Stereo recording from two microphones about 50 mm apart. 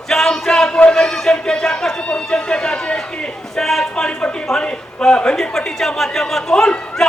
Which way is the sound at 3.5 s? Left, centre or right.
Centre.